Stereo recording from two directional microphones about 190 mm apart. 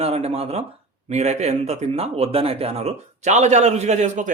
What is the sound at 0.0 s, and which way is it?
A man's voice, 30° right (ahead or behind).